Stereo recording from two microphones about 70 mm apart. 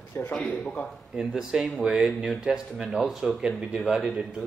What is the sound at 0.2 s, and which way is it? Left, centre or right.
Speech, centre.